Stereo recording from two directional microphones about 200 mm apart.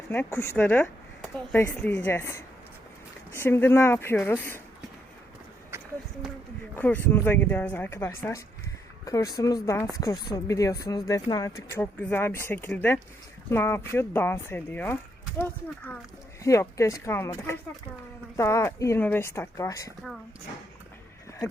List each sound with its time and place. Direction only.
0.1 s speech: 10° left (ahead or behind)
5.7 s a sound: 10° right (ahead or behind)
6.7 s speech: 10° left (ahead or behind)